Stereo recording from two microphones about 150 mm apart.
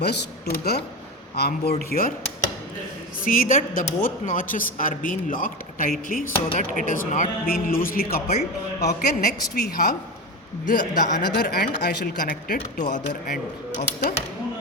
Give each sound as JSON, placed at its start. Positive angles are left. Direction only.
{"t": 0.0, "sound": "speech", "side_deg": 90}
{"t": 1.9, "sound": "speech", "side_deg": 70}
{"t": 3.2, "sound": "speech", "side_deg": 65}
{"t": 10.7, "sound": "speech", "side_deg": 60}